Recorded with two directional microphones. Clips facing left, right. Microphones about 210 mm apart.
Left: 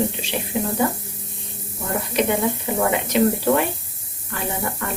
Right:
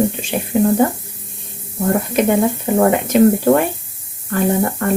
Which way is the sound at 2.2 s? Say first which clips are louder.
Right 4 dB; 50° right (ahead or behind).